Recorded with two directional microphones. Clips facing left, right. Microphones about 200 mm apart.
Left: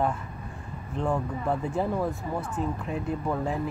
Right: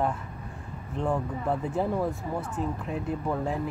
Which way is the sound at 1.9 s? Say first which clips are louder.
Even; 15° right (ahead or behind).